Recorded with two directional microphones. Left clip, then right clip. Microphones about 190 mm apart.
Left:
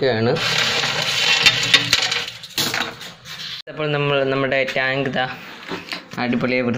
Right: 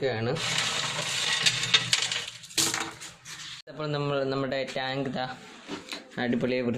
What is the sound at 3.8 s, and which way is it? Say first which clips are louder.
Speech: left 10 dB; 10° right (ahead or behind).